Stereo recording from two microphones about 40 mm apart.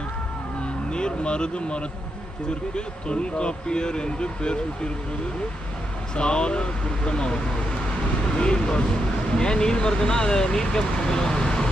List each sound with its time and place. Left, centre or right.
0.9 s speech: left
6.1 s speech: left